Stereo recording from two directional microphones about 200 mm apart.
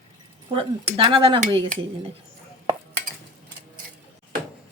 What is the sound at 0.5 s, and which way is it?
Speech, 25° right (ahead or behind).